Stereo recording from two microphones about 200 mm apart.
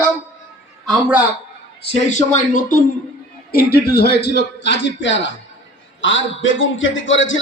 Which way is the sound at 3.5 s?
55° left (ahead or behind).